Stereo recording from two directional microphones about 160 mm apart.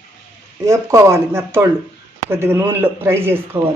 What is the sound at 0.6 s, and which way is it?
Speech, 15° right (ahead or behind).